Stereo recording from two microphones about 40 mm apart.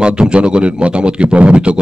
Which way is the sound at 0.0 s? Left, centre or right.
Right.